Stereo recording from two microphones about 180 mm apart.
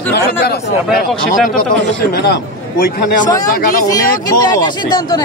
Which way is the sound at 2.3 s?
60° left (ahead or behind).